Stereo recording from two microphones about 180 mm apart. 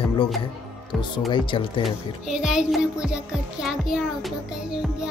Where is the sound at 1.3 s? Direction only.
30° left (ahead or behind).